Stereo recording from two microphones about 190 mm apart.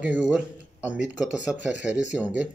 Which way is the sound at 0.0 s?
5° right (ahead or behind).